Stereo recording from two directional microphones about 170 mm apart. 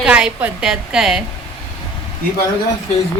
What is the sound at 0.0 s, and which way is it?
A woman's voice, 5° right (ahead or behind).